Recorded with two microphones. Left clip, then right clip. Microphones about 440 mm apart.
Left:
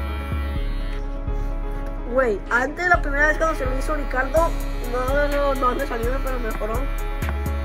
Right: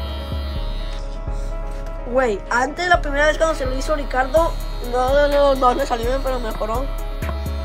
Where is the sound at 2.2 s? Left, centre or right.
Right.